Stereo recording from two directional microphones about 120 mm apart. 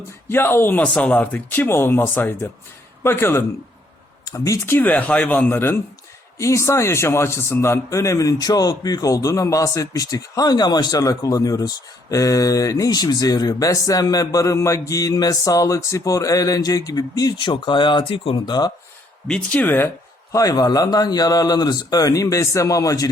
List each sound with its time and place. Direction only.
0.3 s a man's voice: 20° left (ahead or behind); by 18.7 s 35° left (ahead or behind)
19.3 s speech: 15° left (ahead or behind)
20.3 s speech: 30° left (ahead or behind)